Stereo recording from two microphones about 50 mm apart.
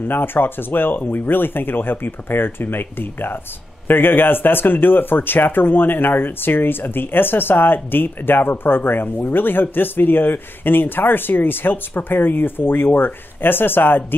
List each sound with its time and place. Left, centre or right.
0.1 s speech: left